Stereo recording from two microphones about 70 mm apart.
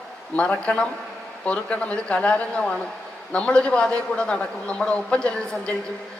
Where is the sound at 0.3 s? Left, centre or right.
Centre.